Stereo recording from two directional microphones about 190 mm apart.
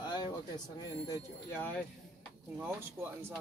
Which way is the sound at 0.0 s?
25° left (ahead or behind).